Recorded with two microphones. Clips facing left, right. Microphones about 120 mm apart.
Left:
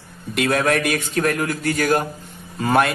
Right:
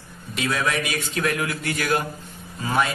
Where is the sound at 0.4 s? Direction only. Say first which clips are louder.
Left 6 dB; 55° left (ahead or behind).